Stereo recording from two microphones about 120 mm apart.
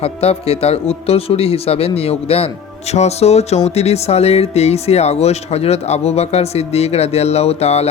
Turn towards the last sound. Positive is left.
turn(degrees=60)  # may be behind; listen again after turning